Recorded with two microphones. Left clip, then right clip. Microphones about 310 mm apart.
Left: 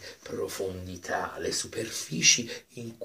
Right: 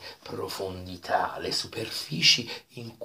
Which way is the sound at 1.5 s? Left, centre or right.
Centre.